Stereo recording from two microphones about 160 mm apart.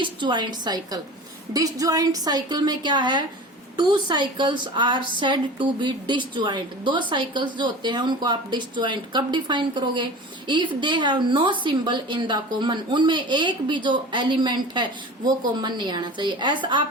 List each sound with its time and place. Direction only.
0.0 s a woman's voice: 30° right (ahead or behind)